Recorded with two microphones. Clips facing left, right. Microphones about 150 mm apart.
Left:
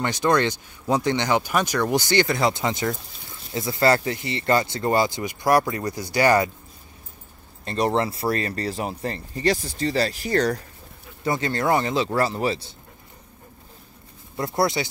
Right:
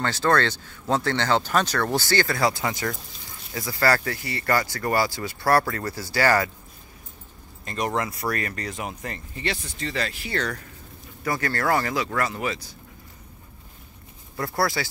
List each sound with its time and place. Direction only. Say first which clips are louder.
0.0 s speech: left 1 dB; 15° left (ahead or behind)
7.6 s speech: left 4 dB; 35° left (ahead or behind)
11.2 s speech: left 2 dB; 20° left (ahead or behind)
14.3 s speech: left 3 dB; 20° left (ahead or behind)